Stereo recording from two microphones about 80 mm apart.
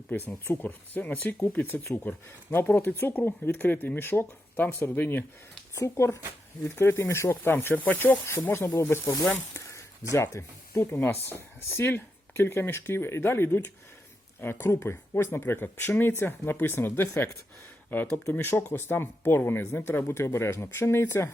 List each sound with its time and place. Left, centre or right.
0.1 s speech: left
5.8 s speech: left
9.6 s a sound: left
10.9 s speech: left